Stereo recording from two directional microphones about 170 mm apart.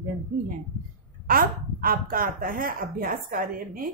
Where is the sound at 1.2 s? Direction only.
60° right (ahead or behind).